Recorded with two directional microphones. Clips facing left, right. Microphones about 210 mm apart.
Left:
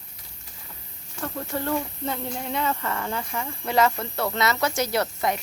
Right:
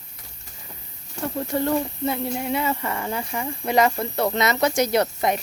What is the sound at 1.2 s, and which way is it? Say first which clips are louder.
Speech: right 5 dB; 15° right (ahead or behind).